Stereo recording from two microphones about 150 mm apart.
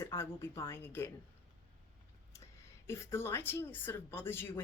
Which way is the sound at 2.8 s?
20° left (ahead or behind).